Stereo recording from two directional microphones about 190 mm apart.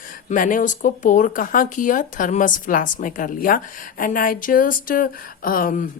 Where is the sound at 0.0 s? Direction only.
45° left (ahead or behind).